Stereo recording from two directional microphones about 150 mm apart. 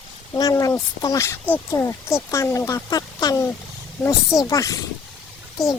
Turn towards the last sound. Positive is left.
turn(degrees=0)  # may be behind; listen again after turning